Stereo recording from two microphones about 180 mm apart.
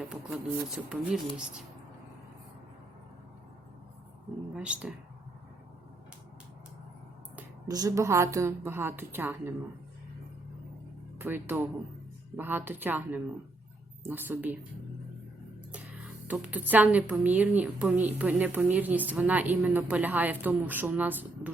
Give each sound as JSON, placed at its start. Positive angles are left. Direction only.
{"t": 0.1, "sound": "speech", "side_deg": 0}
{"t": 4.5, "sound": "speech", "side_deg": -5}
{"t": 7.7, "sound": "speech", "side_deg": -20}
{"t": 11.2, "sound": "speech", "side_deg": -10}
{"t": 16.2, "sound": "speech", "side_deg": -10}